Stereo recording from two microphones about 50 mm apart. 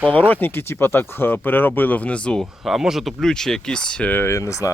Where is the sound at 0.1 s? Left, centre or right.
Left.